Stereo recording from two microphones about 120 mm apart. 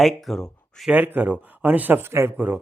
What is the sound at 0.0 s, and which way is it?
Speech, centre (ahead or behind).